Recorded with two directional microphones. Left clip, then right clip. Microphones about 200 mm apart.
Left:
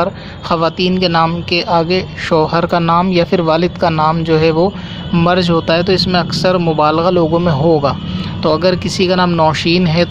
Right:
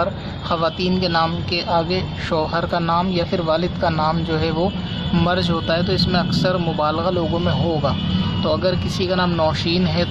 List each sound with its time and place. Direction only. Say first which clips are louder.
0.0 s a man's voice: left 5 dB; 30° left (ahead or behind)